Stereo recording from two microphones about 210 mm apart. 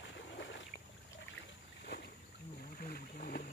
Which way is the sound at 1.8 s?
50° left (ahead or behind).